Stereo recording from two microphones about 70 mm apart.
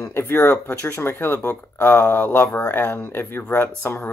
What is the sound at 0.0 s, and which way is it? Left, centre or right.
Speech, left.